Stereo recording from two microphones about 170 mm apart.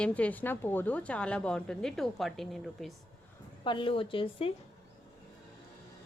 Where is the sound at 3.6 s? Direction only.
30° left (ahead or behind).